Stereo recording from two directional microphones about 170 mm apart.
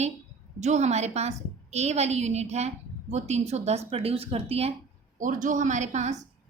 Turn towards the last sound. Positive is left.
turn(degrees=-45)  # may be behind; listen again after turning